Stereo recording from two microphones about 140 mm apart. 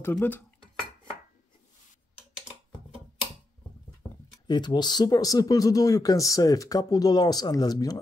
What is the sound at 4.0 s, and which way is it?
Speech, 30° left (ahead or behind).